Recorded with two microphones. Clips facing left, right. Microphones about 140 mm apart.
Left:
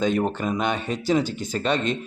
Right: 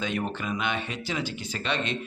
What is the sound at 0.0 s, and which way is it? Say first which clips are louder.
A man's voice: left 7 dB; 40° left (ahead or behind).